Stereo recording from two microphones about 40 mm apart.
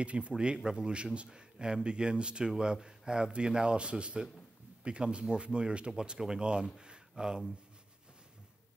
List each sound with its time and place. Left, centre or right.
0.0 s speech: right